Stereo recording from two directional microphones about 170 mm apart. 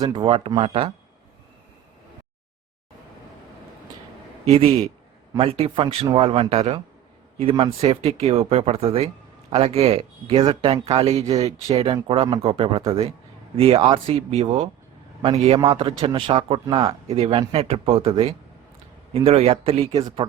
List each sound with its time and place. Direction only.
0.0 s a man's voice: 30° right (ahead or behind)
4.4 s a man's voice: 40° right (ahead or behind)